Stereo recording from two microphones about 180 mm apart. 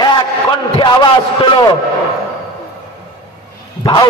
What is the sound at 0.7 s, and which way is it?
Speech, 25° left (ahead or behind).